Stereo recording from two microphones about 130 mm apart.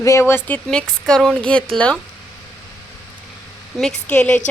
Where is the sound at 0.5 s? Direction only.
5° left (ahead or behind).